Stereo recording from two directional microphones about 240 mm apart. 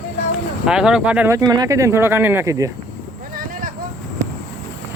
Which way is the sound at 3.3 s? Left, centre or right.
Right.